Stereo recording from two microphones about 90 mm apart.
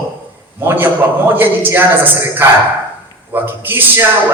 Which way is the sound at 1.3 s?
20° right (ahead or behind).